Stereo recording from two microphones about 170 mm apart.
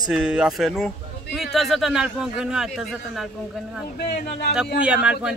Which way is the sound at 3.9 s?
65° left (ahead or behind).